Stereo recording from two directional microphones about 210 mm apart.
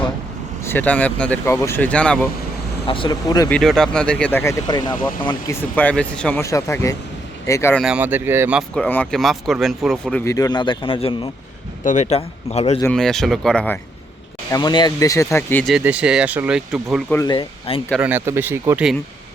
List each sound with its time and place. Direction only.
0.6 s speech: 10° left (ahead or behind)
2.8 s speech: 25° left (ahead or behind)
3.5 s speech: centre (ahead or behind); by 5.5 s 20° left (ahead or behind)
5.7 s speech: 5° left (ahead or behind)
7.8 s a man's voice: 5° right (ahead or behind); by 12.8 s 30° left (ahead or behind)
12.8 s speech: 5° left (ahead or behind)
14.5 s speech: 20° left (ahead or behind)
15.7 s speech: 5° right (ahead or behind)
17.1 s speech: 15° left (ahead or behind)
18.0 s speech: 10° right (ahead or behind)